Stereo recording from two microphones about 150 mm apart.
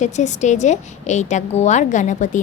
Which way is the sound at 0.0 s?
50° left (ahead or behind).